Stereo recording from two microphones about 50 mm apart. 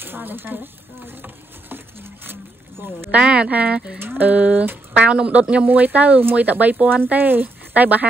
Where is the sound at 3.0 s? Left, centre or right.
Right.